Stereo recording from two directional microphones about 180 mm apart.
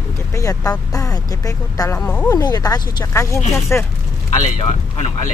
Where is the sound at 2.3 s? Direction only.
20° left (ahead or behind).